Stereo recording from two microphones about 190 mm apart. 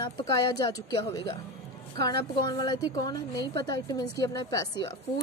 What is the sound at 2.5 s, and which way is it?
Speech, 20° left (ahead or behind).